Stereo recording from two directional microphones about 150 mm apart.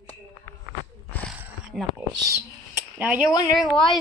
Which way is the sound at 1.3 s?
5° right (ahead or behind).